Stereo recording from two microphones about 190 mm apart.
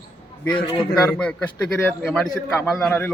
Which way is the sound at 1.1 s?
5° left (ahead or behind).